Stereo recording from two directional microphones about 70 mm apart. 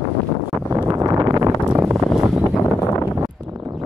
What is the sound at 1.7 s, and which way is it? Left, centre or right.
Wind noise, right.